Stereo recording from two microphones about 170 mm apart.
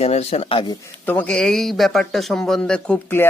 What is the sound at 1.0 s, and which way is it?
A man's voice, 10° left (ahead or behind).